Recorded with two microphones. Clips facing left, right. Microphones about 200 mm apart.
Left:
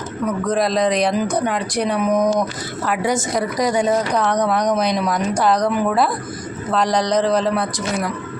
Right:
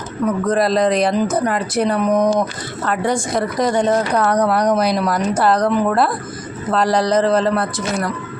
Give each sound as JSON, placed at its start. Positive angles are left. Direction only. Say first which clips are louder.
{"t": 0.4, "sound": "speech", "louder": "right 2 dB", "side_deg": 0}
{"t": 4.1, "sound": "speech", "louder": "right 2 dB", "side_deg": -10}